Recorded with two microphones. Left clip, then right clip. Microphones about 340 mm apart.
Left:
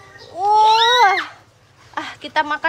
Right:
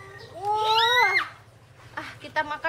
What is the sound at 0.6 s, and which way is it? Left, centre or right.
Speech, left.